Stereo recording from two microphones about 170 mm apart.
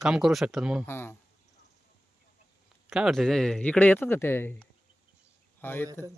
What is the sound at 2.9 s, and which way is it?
A man's voice, centre (ahead or behind).